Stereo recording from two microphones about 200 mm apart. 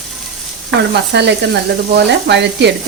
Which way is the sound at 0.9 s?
60° right (ahead or behind).